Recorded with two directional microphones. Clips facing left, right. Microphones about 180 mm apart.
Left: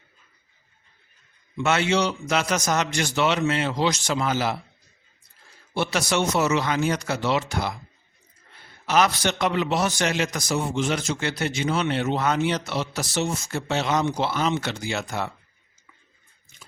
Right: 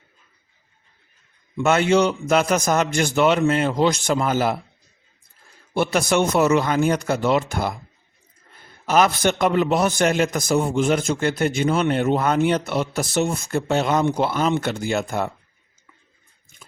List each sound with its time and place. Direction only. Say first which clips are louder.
1.5 s a man's voice: right 5 dB; 50° right (ahead or behind)
5.7 s a man's voice: right 5 dB; 50° right (ahead or behind)
8.9 s a man's voice: right 4 dB; 50° right (ahead or behind)